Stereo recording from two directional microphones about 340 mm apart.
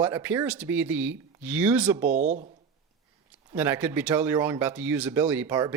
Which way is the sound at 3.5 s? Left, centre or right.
Centre.